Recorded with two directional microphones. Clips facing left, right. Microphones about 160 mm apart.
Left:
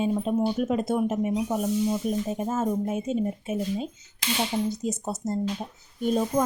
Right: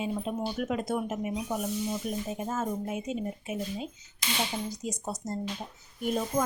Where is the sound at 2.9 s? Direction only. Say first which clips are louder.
Left 6 dB; 30° left (ahead or behind).